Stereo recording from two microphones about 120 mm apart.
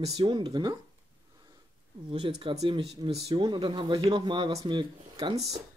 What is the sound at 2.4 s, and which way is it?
Speech, 45° right (ahead or behind).